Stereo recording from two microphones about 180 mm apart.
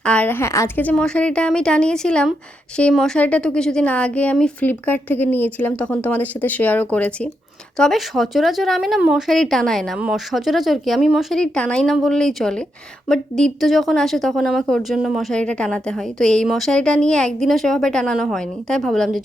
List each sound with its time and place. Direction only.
0.0 s speech: 5° left (ahead or behind)